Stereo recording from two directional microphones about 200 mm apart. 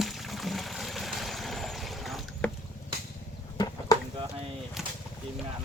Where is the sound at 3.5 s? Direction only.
20° left (ahead or behind).